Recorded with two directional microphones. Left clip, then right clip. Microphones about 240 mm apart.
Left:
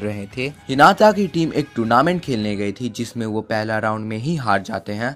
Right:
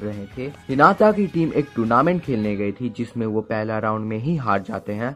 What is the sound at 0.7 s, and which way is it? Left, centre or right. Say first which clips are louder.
Speech: left 3 dB; centre.